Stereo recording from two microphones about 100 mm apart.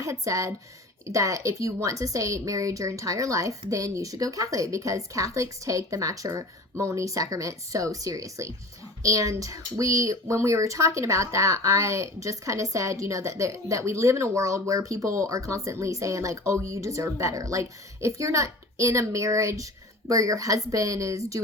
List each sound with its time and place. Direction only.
0.0 s speech: 30° right (ahead or behind)